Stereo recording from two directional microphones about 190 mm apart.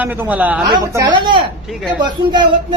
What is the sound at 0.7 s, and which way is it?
Speech, 25° right (ahead or behind).